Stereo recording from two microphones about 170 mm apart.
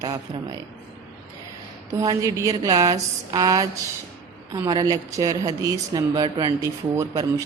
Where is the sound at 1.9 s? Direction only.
20° right (ahead or behind).